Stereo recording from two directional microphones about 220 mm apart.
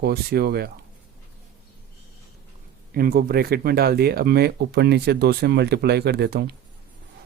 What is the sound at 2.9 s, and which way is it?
Speech, 45° right (ahead or behind).